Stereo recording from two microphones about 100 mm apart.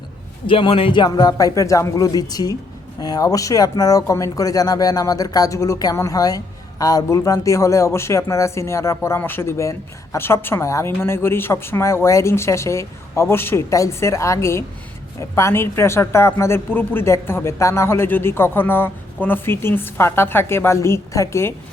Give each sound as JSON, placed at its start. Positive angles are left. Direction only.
{"t": 0.4, "sound": "a man's voice", "side_deg": 60}
{"t": 1.0, "sound": "speech", "side_deg": 40}